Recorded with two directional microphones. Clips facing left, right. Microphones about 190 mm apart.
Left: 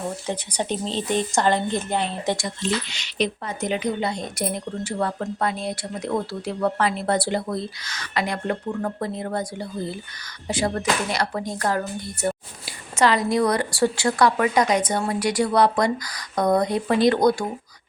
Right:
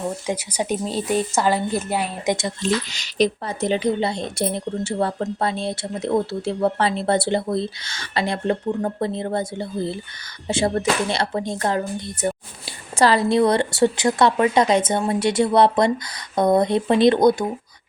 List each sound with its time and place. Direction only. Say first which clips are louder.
0.3 s a woman's voice: right 3 dB; 10° right (ahead or behind)
2.9 s speech: right 5 dB; 40° right (ahead or behind); by 17.4 s 20° right (ahead or behind)